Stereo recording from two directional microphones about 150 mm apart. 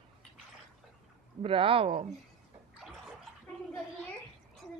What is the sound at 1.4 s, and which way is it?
Speech, 35° right (ahead or behind).